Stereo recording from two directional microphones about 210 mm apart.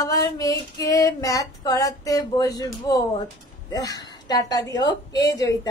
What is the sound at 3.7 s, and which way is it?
A woman's voice, 15° left (ahead or behind).